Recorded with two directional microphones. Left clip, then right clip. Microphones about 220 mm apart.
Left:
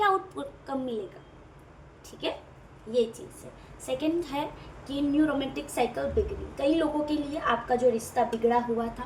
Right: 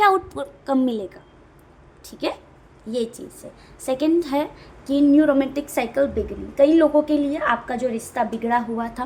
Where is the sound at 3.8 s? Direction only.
50° right (ahead or behind).